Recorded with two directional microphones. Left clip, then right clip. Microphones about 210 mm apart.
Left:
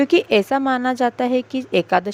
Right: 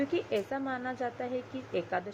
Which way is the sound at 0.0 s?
55° left (ahead or behind).